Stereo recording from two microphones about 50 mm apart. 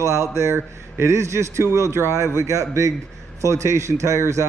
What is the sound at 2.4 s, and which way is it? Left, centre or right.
A man's voice, right.